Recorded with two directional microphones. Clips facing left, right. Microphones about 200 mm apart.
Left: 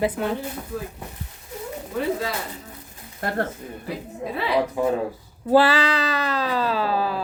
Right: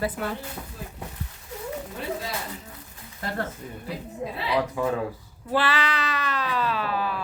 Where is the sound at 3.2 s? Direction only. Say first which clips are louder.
Left 5 dB; 55° left (ahead or behind).